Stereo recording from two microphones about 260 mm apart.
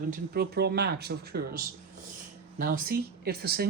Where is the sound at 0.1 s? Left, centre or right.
Right.